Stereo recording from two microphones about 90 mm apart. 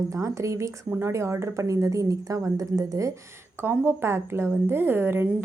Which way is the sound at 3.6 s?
25° right (ahead or behind).